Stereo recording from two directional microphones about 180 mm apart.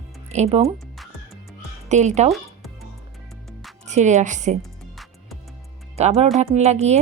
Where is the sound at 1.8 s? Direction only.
40° right (ahead or behind).